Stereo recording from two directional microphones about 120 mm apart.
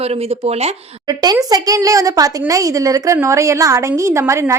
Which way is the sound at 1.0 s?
35° right (ahead or behind).